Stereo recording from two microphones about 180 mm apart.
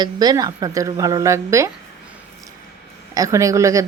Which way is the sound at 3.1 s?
15° right (ahead or behind).